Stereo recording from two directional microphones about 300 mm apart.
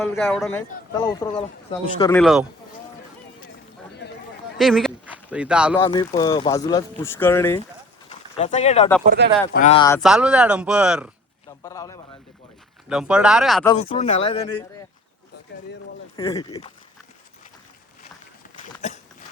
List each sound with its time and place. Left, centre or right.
0.0 s speech: centre
1.0 s speech: centre
4.0 s a sound: left
4.5 s a sound: centre
5.7 s speech: centre
8.4 s speech: left
9.0 s speech: right
9.5 s speech: left
10.0 s speech: centre
11.6 s speech: centre
12.9 s speech: centre
13.7 s speech: centre
16.1 s speech: centre